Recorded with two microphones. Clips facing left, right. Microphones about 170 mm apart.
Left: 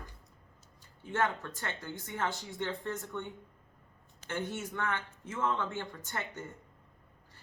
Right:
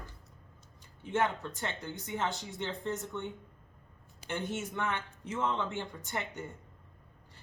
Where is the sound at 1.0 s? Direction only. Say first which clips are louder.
Right 1 dB; 20° right (ahead or behind).